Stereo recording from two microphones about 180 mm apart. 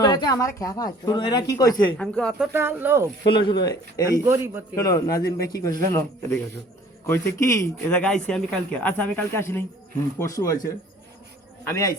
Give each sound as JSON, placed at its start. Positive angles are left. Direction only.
{"t": 0.0, "sound": "speech", "side_deg": 20}
{"t": 2.0, "sound": "speech", "side_deg": 5}
{"t": 2.5, "sound": "speech", "side_deg": -10}
{"t": 3.2, "sound": "speech", "side_deg": 25}
{"t": 4.3, "sound": "speech", "side_deg": -15}
{"t": 4.7, "sound": "a man's voice", "side_deg": 20}
{"t": 7.9, "sound": "a man's voice", "side_deg": 5}
{"t": 11.6, "sound": "a man's voice", "side_deg": 15}